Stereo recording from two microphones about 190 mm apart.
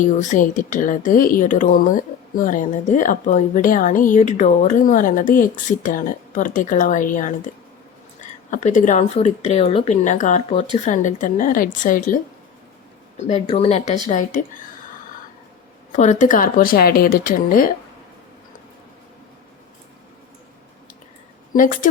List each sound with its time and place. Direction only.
0.0 s a woman's voice: 40° left (ahead or behind)
15.9 s a woman's voice: 40° left (ahead or behind)
21.5 s a woman's voice: 45° left (ahead or behind)